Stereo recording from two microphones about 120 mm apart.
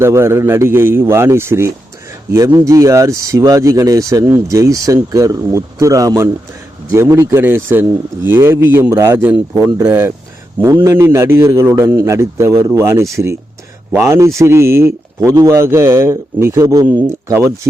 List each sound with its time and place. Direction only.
0.0 s speech: 20° right (ahead or behind)
10.6 s speech: 25° right (ahead or behind)